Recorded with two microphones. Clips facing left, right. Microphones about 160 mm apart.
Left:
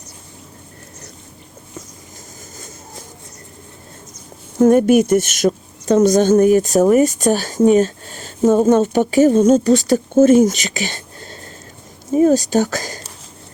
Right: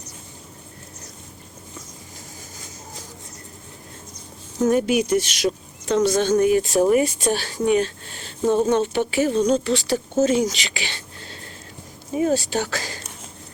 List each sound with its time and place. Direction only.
4.5 s speech: 50° left (ahead or behind)